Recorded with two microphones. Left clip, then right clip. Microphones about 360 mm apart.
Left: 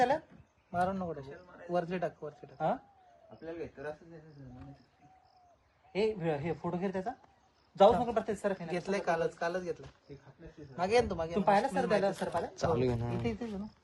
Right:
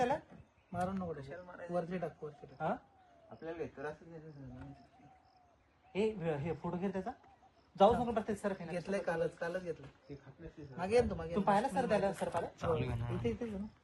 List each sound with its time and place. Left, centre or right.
0.7 s a man's voice: centre
1.3 s speech: centre
1.7 s a man's voice: centre
3.4 s speech: centre
5.9 s a man's voice: left
10.1 s speech: centre
10.8 s a man's voice: centre